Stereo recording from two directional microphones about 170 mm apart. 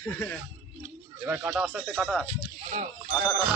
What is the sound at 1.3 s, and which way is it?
Speech, 10° right (ahead or behind).